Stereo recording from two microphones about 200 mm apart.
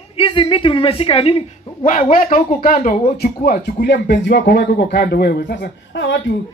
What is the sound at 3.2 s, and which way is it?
Speech, 50° left (ahead or behind).